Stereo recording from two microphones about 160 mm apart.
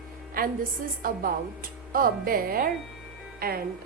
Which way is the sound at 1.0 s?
65° right (ahead or behind).